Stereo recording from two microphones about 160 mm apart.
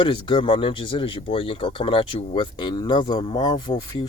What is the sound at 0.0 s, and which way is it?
Speech, 30° left (ahead or behind).